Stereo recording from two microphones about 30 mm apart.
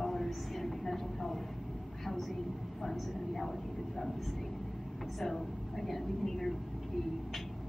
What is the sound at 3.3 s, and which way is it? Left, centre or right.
Speech, centre.